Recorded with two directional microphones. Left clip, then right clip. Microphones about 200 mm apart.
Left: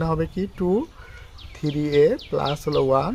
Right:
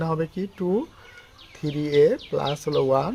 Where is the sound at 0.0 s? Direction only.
15° left (ahead or behind).